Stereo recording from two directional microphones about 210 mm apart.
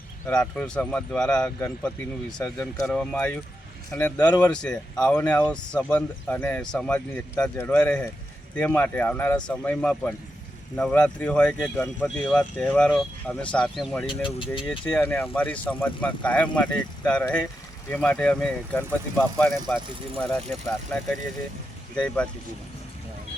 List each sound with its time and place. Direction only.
0.5 s speech: 5° left (ahead or behind)
4.5 s speech: 5° left (ahead or behind)
14.1 s speech: 25° left (ahead or behind)
14.7 s speech: 5° left (ahead or behind)
21.9 s speech: 5° left (ahead or behind)